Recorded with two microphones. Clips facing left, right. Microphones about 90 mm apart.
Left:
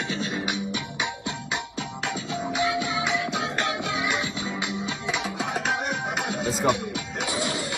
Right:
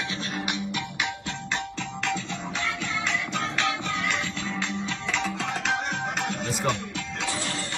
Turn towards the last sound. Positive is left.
turn(degrees=10)  # may be behind; listen again after turning